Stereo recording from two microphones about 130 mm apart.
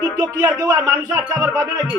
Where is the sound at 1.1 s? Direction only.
5° right (ahead or behind).